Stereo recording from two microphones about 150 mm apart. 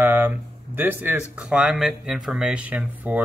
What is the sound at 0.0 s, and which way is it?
Speech, 15° right (ahead or behind).